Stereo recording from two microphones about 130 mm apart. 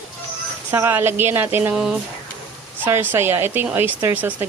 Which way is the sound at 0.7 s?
15° right (ahead or behind).